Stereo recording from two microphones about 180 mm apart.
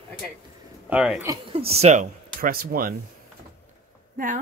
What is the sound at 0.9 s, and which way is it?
Speech, 5° right (ahead or behind).